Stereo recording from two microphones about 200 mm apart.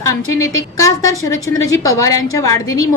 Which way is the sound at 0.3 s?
15° left (ahead or behind).